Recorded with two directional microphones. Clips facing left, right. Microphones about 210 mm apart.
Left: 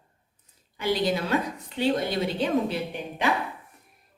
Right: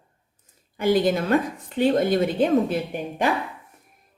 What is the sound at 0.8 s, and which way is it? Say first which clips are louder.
A woman's voice: right 5 dB; 50° right (ahead or behind).